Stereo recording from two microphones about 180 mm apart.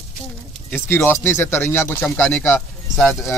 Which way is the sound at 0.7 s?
10° left (ahead or behind).